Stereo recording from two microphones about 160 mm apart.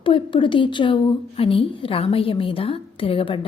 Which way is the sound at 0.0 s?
30° left (ahead or behind).